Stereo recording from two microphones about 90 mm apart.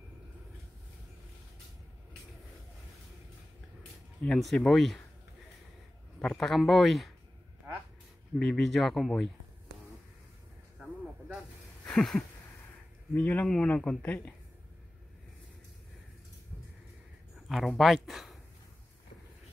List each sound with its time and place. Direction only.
4.4 s speech: 5° left (ahead or behind)
6.2 s speech: 5° left (ahead or behind)
8.4 s speech: 5° left (ahead or behind)
10.8 s a sound: 15° right (ahead or behind)
11.8 s a sound: 10° left (ahead or behind)
13.1 s speech: 20° left (ahead or behind)
17.5 s speech: centre (ahead or behind)